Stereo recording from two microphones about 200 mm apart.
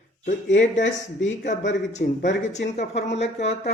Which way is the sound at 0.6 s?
35° left (ahead or behind).